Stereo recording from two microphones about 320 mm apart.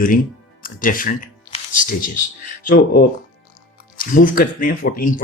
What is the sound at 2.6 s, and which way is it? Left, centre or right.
Speech, left.